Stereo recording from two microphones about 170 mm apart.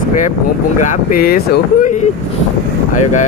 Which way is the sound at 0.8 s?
55° left (ahead or behind).